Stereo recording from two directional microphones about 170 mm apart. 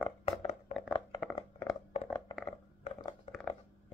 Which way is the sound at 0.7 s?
50° left (ahead or behind).